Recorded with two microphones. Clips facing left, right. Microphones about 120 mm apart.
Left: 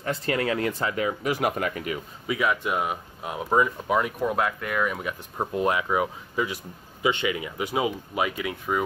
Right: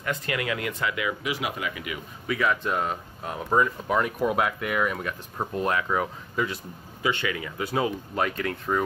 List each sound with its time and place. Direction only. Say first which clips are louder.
0.0 s speech: left 3 dB; 35° left (ahead or behind)
2.2 s speech: even; 15° left (ahead or behind); by 4.9 s 5° right (ahead or behind)
4.9 s speech: left 1 dB; 10° left (ahead or behind)